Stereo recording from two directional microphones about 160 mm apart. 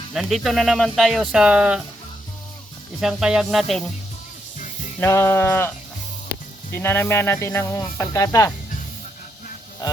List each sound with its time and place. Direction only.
0.1 s speech: centre (ahead or behind)
3.0 s speech: 5° right (ahead or behind)
4.9 s speech: 15° left (ahead or behind)
6.7 s speech: 15° left (ahead or behind)